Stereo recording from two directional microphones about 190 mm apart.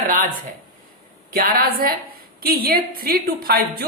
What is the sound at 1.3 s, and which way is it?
A woman's voice, 50° right (ahead or behind).